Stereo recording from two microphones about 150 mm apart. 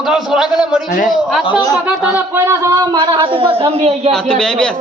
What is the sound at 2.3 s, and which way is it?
A man's voice, 20° right (ahead or behind).